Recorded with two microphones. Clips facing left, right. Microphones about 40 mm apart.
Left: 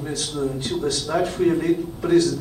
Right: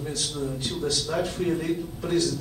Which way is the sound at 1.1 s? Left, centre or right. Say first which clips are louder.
Left 8 dB; left.